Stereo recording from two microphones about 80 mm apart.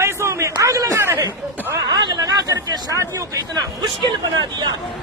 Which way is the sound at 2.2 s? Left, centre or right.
Right.